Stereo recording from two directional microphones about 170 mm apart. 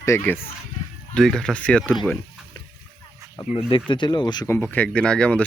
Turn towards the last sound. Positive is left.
turn(degrees=5)  # may be behind; listen again after turning